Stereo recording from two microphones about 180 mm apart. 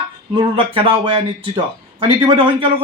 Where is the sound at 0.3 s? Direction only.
30° right (ahead or behind).